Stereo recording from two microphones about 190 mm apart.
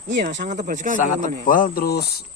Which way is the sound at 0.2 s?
40° right (ahead or behind).